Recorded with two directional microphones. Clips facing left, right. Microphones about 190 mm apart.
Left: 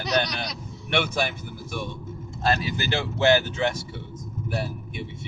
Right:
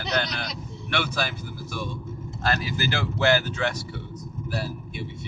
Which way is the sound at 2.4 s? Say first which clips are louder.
Left 2 dB; 25° left (ahead or behind).